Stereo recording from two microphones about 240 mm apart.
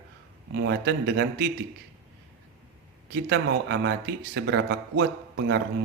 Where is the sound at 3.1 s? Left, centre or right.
Right.